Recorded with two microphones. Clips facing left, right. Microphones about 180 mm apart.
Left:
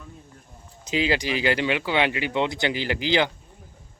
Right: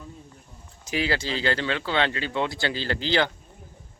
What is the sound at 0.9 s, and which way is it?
Speech, 20° left (ahead or behind).